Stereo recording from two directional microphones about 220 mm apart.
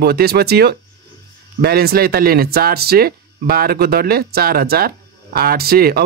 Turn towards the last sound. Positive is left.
turn(degrees=-45)  # may be behind; listen again after turning